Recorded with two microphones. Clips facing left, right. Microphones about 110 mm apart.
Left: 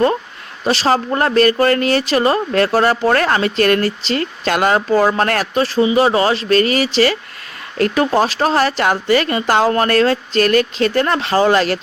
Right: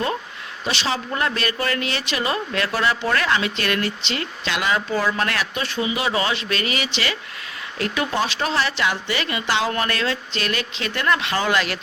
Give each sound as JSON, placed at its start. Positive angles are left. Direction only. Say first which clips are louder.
{"t": 0.6, "sound": "speech", "louder": "left 9 dB", "side_deg": 40}